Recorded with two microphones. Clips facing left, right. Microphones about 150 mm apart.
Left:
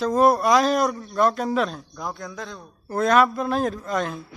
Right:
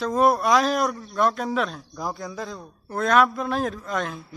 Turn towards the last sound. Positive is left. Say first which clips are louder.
# left 2 dB
turn(degrees=0)  # may be behind; listen again after turning